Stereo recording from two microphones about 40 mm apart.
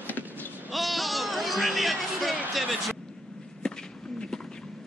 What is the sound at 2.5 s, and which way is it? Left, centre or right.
Speech, centre.